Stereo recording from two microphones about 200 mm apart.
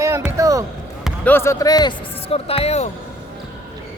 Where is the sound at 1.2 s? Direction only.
10° left (ahead or behind); by 2.8 s 30° left (ahead or behind).